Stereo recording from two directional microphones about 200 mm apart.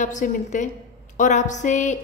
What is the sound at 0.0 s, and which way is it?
A woman's voice, 40° left (ahead or behind).